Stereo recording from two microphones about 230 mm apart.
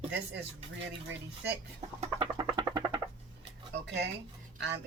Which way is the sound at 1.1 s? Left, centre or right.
Right.